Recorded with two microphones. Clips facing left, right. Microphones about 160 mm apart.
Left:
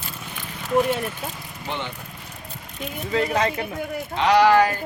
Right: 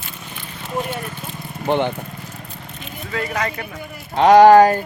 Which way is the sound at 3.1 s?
25° left (ahead or behind).